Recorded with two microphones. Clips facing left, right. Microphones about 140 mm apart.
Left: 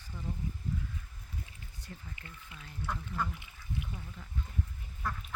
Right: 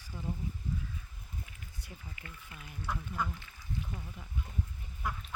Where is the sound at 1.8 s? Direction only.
10° right (ahead or behind).